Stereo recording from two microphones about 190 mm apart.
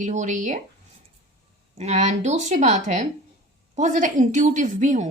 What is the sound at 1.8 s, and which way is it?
A woman's voice, 35° right (ahead or behind).